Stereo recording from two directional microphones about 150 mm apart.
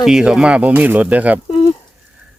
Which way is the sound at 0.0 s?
5° right (ahead or behind).